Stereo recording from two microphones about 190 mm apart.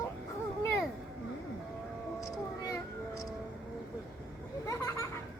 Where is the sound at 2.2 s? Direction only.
15° left (ahead or behind).